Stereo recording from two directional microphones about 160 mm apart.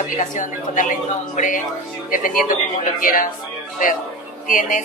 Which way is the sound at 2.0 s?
60° left (ahead or behind).